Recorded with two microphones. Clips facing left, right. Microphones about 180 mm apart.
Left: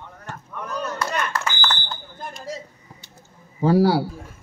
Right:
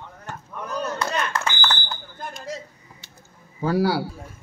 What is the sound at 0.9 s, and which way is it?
Speech, 25° right (ahead or behind).